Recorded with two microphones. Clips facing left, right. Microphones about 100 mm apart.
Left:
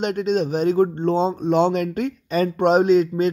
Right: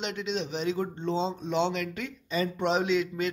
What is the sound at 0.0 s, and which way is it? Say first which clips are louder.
Speech: left 11 dB; 50° left (ahead or behind).